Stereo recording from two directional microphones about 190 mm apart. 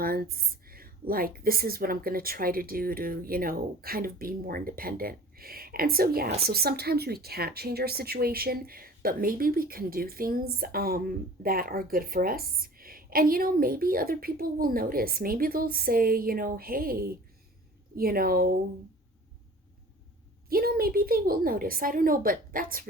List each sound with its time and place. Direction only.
0.0 s speech: 50° right (ahead or behind)
20.5 s speech: 50° right (ahead or behind)